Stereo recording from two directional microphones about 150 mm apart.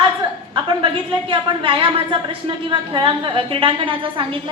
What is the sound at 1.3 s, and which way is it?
A woman's voice, 35° right (ahead or behind).